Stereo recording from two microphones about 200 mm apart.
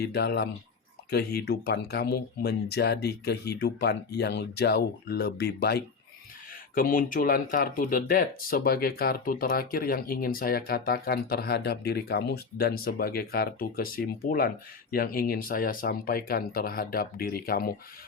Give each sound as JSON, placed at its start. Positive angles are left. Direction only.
{"t": 0.0, "sound": "speech", "side_deg": 55}
{"t": 6.7, "sound": "speech", "side_deg": 45}